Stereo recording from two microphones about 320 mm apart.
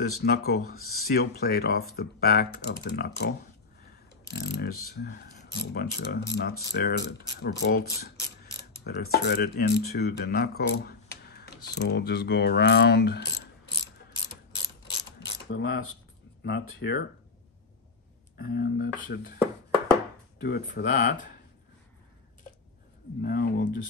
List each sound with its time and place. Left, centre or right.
0.2 s speech: left
4.3 s mechanisms: left
4.8 s speech: left
14.9 s mechanisms: left
16.4 s speech: left
18.4 s speech: left
20.4 s speech: left
23.2 s speech: left